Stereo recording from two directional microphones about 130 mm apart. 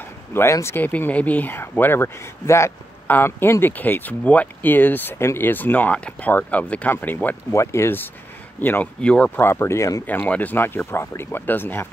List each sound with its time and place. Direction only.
0.3 s speech: 20° left (ahead or behind)
10.0 s speech: 15° left (ahead or behind)